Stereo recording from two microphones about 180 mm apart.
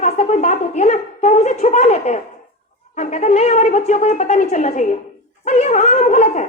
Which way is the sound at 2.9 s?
40° left (ahead or behind).